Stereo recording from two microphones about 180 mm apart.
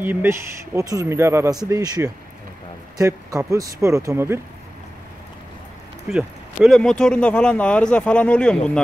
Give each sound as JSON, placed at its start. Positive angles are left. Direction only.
{"t": 0.0, "sound": "speech", "side_deg": -10}
{"t": 6.0, "sound": "speech", "side_deg": 0}